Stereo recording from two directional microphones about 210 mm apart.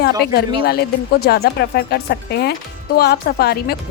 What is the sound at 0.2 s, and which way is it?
Speech, 50° left (ahead or behind).